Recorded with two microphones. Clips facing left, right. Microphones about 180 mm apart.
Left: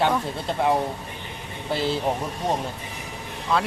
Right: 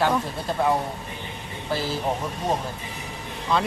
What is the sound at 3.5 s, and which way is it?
Speech, 5° left (ahead or behind).